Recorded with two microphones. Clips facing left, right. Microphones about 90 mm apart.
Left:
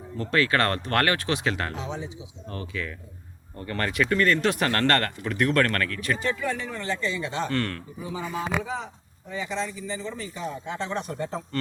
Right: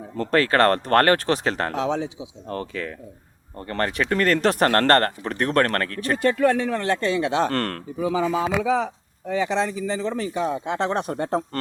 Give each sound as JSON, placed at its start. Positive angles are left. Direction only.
{"t": 0.2, "sound": "speech", "side_deg": -40}
{"t": 1.7, "sound": "speech", "side_deg": -90}
{"t": 2.5, "sound": "speech", "side_deg": -40}
{"t": 6.2, "sound": "speech", "side_deg": -70}
{"t": 7.5, "sound": "a man's voice", "side_deg": -45}
{"t": 7.9, "sound": "speech", "side_deg": -90}